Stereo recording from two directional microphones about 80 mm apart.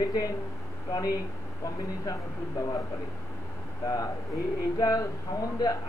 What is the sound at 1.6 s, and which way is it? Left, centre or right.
Speech, left.